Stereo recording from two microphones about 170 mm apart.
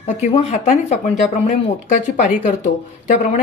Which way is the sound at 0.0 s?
40° left (ahead or behind).